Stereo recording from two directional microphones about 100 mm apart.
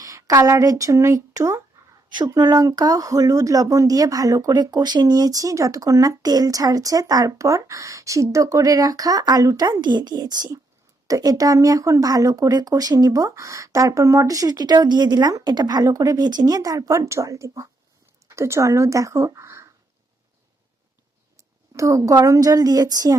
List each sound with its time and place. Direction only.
0.0 s speech: 35° right (ahead or behind)
21.3 s a woman's voice: 30° right (ahead or behind)